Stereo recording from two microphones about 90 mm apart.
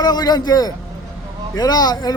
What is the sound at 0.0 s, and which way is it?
Speech, 45° left (ahead or behind).